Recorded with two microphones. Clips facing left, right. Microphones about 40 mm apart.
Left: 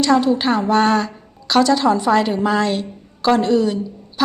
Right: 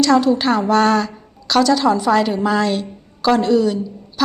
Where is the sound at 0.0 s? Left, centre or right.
Left.